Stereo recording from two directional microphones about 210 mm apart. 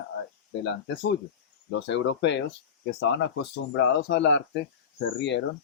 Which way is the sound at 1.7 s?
60° left (ahead or behind).